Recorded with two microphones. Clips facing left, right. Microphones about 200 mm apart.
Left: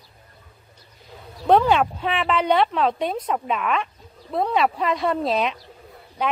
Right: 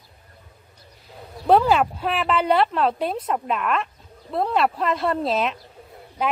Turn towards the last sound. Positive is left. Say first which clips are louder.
# even
turn(degrees=0)  # may be behind; listen again after turning